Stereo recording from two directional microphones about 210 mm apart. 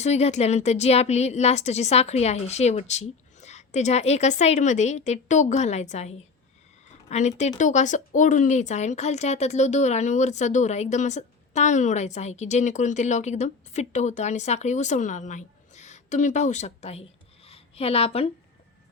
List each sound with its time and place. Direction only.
0.0 s speech: 30° left (ahead or behind)